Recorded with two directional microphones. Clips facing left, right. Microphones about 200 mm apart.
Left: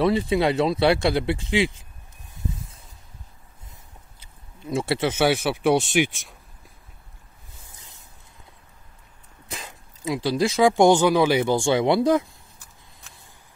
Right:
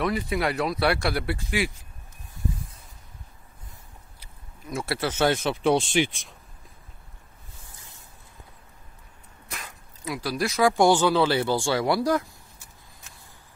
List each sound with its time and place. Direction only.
0.0 s speech: 25° left (ahead or behind)
4.2 s speech: 25° left (ahead or behind); by 6.0 s 10° left (ahead or behind)
9.5 s speech: 25° left (ahead or behind)